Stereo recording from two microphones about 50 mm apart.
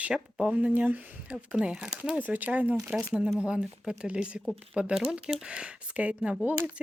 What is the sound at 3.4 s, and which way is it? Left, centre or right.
Speech, right.